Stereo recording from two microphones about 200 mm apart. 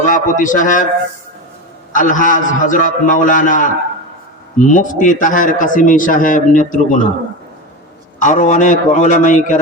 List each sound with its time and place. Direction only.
0.0 s a man's voice: 40° left (ahead or behind)
1.9 s a man's voice: 40° left (ahead or behind)
4.7 s a man's voice: 40° left (ahead or behind)
8.2 s a man's voice: 40° left (ahead or behind)